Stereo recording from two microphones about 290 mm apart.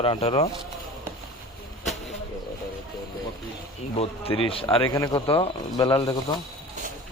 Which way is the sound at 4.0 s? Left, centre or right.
Centre.